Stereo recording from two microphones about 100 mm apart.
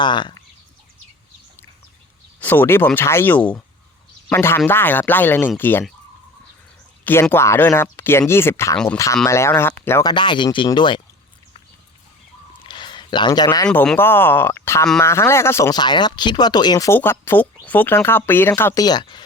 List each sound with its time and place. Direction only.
0.0 s speech: 50° left (ahead or behind)
2.4 s speech: 20° left (ahead or behind)
4.3 s speech: 25° left (ahead or behind)
7.0 s speech: 20° left (ahead or behind)
10.0 s speech: 50° left (ahead or behind)
12.6 s a sound: 50° left (ahead or behind)
13.9 s speech: 20° left (ahead or behind)
15.7 s speech: 45° left (ahead or behind)
16.9 s speech: 25° left (ahead or behind)
18.8 s speech: 45° left (ahead or behind)